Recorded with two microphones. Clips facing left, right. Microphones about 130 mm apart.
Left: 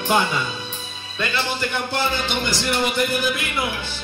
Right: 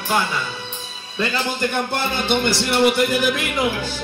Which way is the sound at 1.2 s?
40° right (ahead or behind).